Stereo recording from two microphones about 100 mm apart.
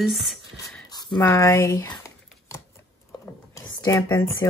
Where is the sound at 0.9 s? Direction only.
45° left (ahead or behind).